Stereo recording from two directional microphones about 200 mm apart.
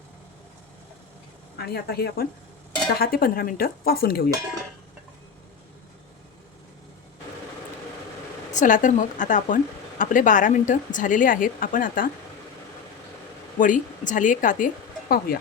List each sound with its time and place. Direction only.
1.5 s speech: 55° left (ahead or behind)
8.5 s a woman's voice: 40° left (ahead or behind)
13.6 s a woman's voice: 40° left (ahead or behind)